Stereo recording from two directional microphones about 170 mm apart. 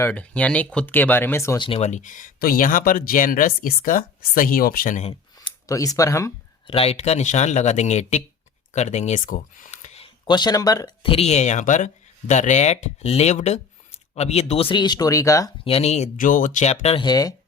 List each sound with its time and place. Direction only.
0.0 s speech: 10° left (ahead or behind)
1.5 s speech: 30° left (ahead or behind); by 5.1 s 50° left (ahead or behind)
5.5 s speech: 20° left (ahead or behind)
6.7 s speech: 35° left (ahead or behind)
10.2 s speech: 25° left (ahead or behind)
15.6 s speech: 35° left (ahead or behind)